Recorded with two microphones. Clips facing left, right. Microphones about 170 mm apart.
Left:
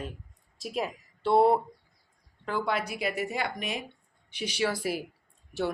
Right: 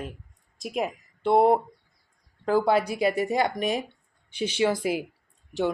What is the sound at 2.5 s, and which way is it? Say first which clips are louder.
Speech: right 8 dB; 35° right (ahead or behind).